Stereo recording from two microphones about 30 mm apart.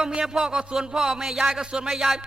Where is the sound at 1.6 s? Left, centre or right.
Right.